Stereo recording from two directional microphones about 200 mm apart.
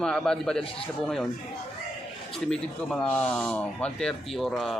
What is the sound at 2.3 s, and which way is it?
Speech, 5° left (ahead or behind).